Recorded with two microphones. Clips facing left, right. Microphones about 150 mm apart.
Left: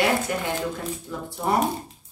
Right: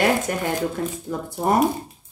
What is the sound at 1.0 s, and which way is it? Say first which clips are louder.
Speech: right 4 dB; 45° right (ahead or behind).